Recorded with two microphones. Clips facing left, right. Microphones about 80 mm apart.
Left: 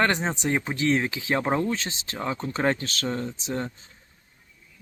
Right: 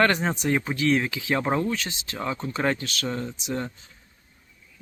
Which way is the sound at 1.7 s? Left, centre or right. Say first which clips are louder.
Even; left.